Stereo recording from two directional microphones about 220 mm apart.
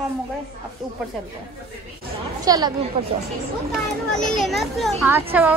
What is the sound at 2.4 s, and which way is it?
Speech, 15° right (ahead or behind).